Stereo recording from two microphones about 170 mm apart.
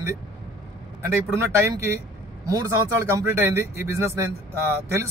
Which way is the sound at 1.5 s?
15° right (ahead or behind).